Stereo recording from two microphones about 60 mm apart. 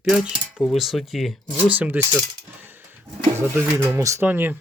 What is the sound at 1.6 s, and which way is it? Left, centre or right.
Speech, right.